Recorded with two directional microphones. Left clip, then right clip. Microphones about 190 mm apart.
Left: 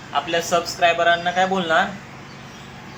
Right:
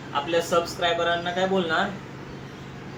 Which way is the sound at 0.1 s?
30° left (ahead or behind).